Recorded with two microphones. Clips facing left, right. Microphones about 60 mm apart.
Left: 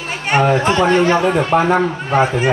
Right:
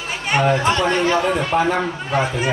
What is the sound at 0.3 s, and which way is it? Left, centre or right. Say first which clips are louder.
Speech: left 3 dB; left.